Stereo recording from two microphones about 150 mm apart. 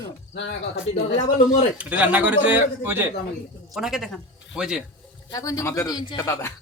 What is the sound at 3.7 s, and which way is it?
Speech, centre (ahead or behind).